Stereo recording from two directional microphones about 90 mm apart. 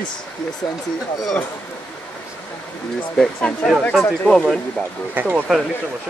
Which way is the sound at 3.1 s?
10° left (ahead or behind).